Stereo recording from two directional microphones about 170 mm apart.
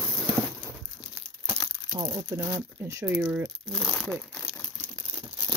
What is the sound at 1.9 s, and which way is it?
Speech, 25° right (ahead or behind).